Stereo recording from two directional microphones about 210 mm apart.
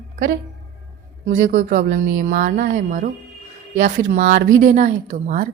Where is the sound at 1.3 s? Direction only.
40° right (ahead or behind).